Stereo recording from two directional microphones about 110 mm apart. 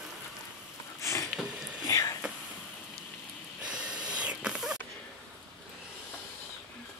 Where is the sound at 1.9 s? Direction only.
35° left (ahead or behind).